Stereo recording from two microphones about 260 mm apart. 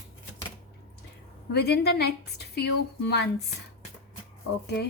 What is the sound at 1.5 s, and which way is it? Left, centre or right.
A woman's voice, left.